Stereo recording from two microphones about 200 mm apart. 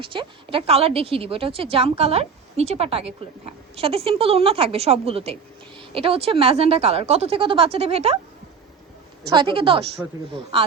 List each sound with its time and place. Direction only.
0.0 s a woman's voice: 25° right (ahead or behind)
9.3 s a woman's voice: 25° right (ahead or behind)